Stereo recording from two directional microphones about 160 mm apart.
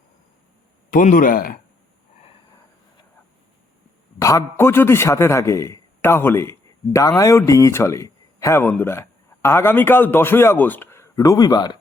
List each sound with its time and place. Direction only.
0.9 s speech: 55° left (ahead or behind)
4.2 s a man's voice: 20° left (ahead or behind)